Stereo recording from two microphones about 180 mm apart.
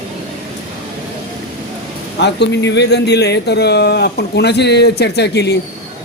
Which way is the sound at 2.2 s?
70° left (ahead or behind).